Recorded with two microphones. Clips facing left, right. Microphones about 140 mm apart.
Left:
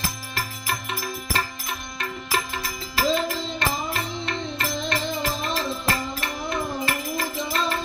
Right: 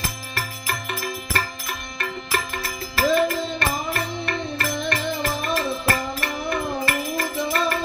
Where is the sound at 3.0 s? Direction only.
55° right (ahead or behind).